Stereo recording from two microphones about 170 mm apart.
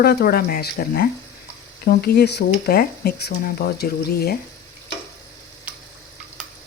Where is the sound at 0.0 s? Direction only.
65° left (ahead or behind).